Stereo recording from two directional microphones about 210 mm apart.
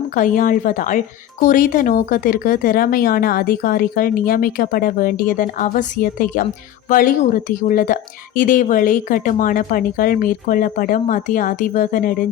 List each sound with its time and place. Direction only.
0.2 s speech: 40° left (ahead or behind)